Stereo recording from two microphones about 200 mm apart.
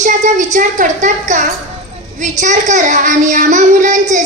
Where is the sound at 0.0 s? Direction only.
40° right (ahead or behind).